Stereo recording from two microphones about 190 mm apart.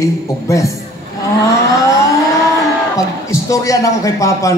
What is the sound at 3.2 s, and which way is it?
A man's voice, 15° left (ahead or behind).